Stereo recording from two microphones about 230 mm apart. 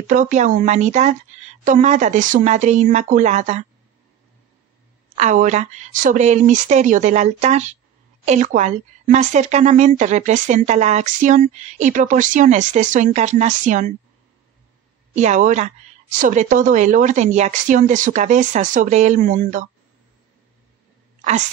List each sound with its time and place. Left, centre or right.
0.1 s speech: right
5.1 s speech: right
15.1 s speech: right
21.2 s a sound: right